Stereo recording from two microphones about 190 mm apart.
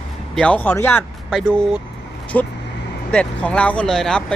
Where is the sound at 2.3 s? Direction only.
10° left (ahead or behind).